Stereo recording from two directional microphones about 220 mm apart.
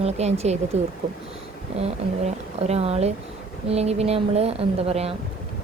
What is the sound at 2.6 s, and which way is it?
A woman's voice, 30° right (ahead or behind).